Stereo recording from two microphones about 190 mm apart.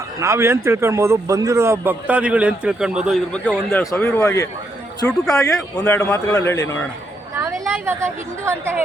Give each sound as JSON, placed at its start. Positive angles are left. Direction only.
{"t": 0.2, "sound": "speech", "side_deg": -15}
{"t": 3.7, "sound": "a man's voice", "side_deg": 10}
{"t": 5.0, "sound": "a man's voice", "side_deg": 5}
{"t": 7.9, "sound": "speech", "side_deg": -15}